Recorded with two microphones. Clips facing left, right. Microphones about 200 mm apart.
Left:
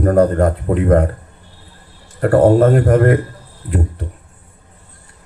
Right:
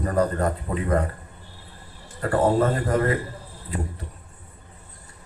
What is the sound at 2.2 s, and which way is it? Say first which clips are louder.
A man's voice: left 10 dB; 70° left (ahead or behind).